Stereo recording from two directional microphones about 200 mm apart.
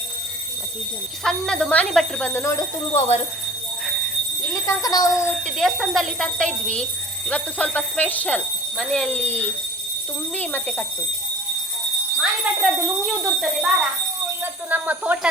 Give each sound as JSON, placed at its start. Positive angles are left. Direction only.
{"t": 1.2, "sound": "speech", "side_deg": 5}
{"t": 2.9, "sound": "speech", "side_deg": 30}
{"t": 4.5, "sound": "speech", "side_deg": 15}
{"t": 5.5, "sound": "speech", "side_deg": 0}
{"t": 12.2, "sound": "speech", "side_deg": -5}
{"t": 14.7, "sound": "speech", "side_deg": -10}